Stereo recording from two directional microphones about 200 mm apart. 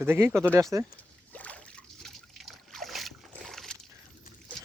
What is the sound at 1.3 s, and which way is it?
Boat, 5° left (ahead or behind).